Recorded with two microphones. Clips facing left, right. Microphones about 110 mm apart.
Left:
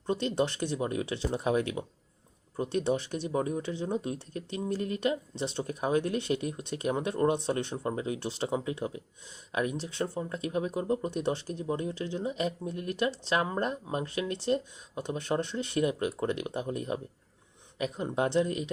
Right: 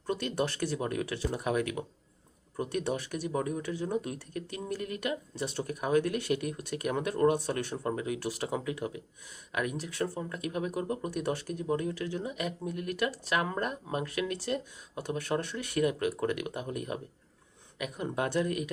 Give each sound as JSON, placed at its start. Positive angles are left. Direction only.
{"t": 0.1, "sound": "speech", "side_deg": 25}